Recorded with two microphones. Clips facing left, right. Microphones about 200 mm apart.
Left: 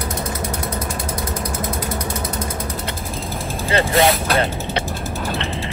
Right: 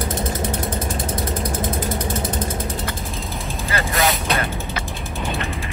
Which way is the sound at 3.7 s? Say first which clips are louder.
Left 6 dB; 30° left (ahead or behind).